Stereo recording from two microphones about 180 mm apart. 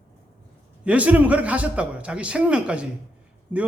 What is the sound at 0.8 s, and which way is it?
A man's voice, 5° right (ahead or behind).